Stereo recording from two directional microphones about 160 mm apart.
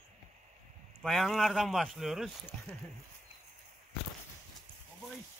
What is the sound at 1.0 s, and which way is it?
Speech, centre (ahead or behind).